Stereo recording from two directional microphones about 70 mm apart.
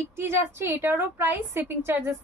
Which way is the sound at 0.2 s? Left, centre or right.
Right.